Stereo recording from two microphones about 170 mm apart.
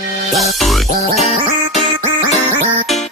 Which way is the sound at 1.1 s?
40° left (ahead or behind).